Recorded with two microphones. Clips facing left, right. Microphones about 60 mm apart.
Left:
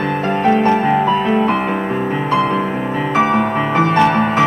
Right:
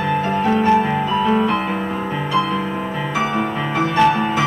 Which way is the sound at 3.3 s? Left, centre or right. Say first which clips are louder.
Left 5 dB; left.